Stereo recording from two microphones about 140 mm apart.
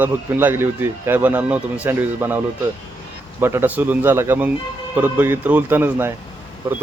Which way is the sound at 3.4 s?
15° right (ahead or behind).